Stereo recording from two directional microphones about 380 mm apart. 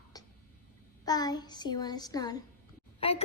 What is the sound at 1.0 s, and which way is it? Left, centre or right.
Child singing, centre.